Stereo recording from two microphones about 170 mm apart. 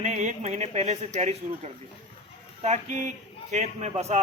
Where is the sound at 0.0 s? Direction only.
45° right (ahead or behind).